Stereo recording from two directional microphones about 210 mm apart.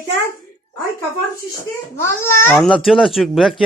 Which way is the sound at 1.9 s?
10° left (ahead or behind).